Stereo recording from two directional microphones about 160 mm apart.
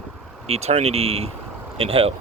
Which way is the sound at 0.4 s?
40° right (ahead or behind).